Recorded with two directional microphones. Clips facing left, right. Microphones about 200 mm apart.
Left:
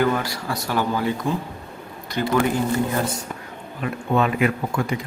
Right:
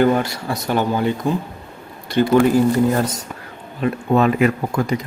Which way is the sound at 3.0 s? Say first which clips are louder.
Right 3 dB; 40° right (ahead or behind).